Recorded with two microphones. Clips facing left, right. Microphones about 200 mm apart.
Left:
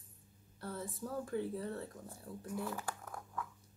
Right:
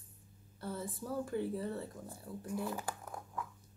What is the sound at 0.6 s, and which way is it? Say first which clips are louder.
Speech: right 1 dB; centre (ahead or behind).